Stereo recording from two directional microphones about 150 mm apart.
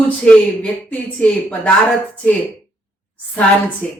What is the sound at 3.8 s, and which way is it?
Speech, 10° left (ahead or behind).